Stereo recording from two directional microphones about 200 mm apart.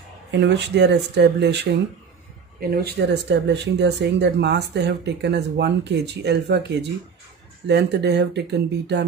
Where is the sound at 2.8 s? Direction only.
60° right (ahead or behind).